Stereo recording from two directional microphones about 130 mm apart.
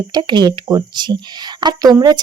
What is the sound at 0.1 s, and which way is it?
Speech, 35° right (ahead or behind).